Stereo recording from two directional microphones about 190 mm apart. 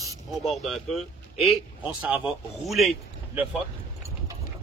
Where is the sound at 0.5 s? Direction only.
Centre (ahead or behind).